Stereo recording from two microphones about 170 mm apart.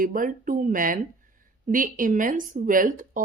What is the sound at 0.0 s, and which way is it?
A woman's voice, 50° right (ahead or behind).